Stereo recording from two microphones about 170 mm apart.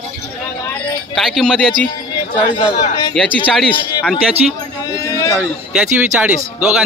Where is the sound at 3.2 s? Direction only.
Centre (ahead or behind).